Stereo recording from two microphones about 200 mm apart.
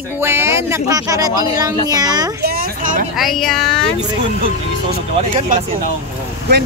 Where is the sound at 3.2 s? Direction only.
Centre (ahead or behind).